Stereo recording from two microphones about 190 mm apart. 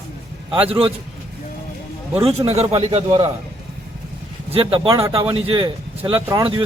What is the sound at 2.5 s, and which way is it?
Speech, 35° right (ahead or behind).